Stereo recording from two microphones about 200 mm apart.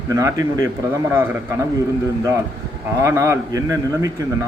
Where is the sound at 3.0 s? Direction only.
15° right (ahead or behind).